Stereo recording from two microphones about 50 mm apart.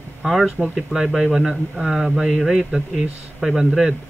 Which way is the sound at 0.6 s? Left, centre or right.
Centre.